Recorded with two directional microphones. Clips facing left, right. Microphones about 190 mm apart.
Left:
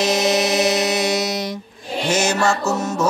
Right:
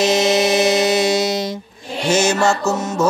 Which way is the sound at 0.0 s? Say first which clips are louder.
Right 3 dB; 25° right (ahead or behind).